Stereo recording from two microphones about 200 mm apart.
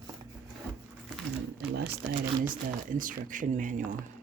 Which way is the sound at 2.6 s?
40° right (ahead or behind).